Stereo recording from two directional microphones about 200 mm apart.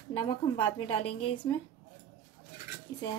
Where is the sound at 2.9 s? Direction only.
15° left (ahead or behind).